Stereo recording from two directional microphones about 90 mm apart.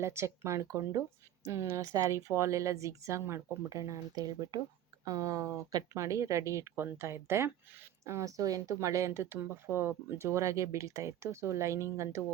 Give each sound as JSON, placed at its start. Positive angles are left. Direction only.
{"t": 0.0, "sound": "speech", "side_deg": -30}